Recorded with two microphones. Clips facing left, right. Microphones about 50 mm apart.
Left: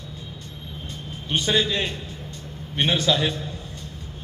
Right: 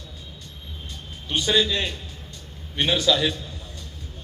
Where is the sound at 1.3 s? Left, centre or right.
Left.